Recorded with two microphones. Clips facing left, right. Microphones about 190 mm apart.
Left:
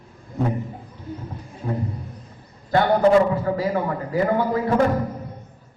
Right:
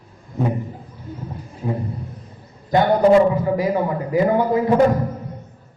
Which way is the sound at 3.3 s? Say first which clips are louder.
Right 3 dB; 15° right (ahead or behind).